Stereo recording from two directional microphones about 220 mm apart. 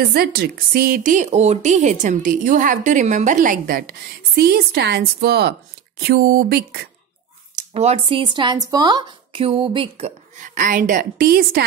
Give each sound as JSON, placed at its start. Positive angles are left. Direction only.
{"t": 0.0, "sound": "a woman's voice", "side_deg": -45}
{"t": 7.5, "sound": "speech", "side_deg": -30}